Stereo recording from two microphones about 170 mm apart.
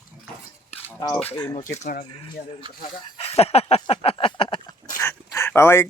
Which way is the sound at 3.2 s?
35° left (ahead or behind).